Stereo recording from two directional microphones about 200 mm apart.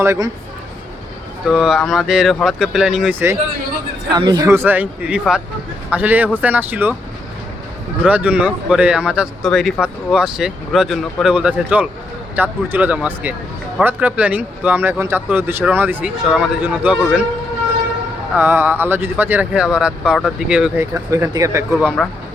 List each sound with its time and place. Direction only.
0.0 s speech: 15° right (ahead or behind)
1.5 s speech: centre (ahead or behind)
4.1 s speech: 20° right (ahead or behind)
8.0 s speech: 5° right (ahead or behind)
18.3 s speech: 10° right (ahead or behind)
20.9 s speech: 15° right (ahead or behind)
21.8 s speech: 5° right (ahead or behind)